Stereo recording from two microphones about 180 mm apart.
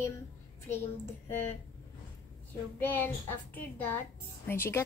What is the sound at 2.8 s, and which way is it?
Speech, 10° left (ahead or behind).